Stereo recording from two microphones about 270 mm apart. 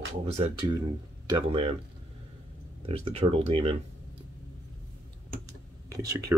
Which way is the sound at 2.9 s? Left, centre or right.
Right.